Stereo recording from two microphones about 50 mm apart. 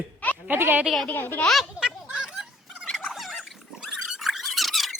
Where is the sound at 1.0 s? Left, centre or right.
Left.